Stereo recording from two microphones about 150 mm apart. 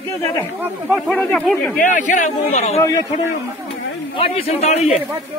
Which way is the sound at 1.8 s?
55° left (ahead or behind).